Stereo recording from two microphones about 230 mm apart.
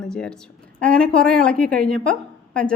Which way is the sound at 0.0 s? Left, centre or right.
Centre.